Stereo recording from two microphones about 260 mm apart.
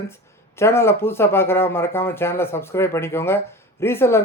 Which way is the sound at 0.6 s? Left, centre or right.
Centre.